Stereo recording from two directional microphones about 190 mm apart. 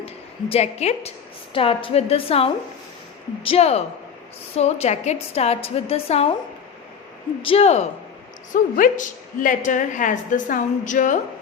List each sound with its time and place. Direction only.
0.0 s a woman's voice: 30° left (ahead or behind)
7.4 s a woman's voice: 35° left (ahead or behind)
8.5 s a woman's voice: 45° left (ahead or behind)